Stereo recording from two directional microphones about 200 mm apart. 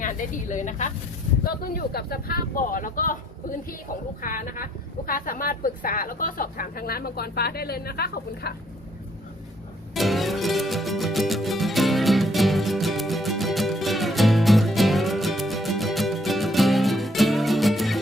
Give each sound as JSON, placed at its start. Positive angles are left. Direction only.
{"t": 0.0, "sound": "speech", "side_deg": 40}
{"t": 1.5, "sound": "a woman's voice", "side_deg": 50}
{"t": 4.2, "sound": "a woman's voice", "side_deg": 40}
{"t": 9.9, "sound": "music", "side_deg": 0}